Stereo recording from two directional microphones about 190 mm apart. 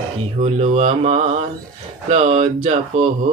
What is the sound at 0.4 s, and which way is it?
Speech, 35° right (ahead or behind).